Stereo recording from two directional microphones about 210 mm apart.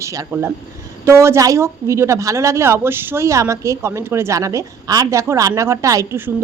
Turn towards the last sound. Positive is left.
turn(degrees=-10)  # may be behind; listen again after turning